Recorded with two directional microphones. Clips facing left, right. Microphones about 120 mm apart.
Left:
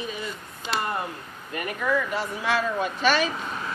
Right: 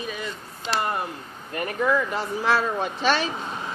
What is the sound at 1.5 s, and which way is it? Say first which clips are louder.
Speech: right 3 dB; 35° right (ahead or behind).